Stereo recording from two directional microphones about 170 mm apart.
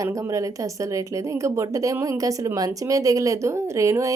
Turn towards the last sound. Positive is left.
turn(degrees=-20)  # may be behind; listen again after turning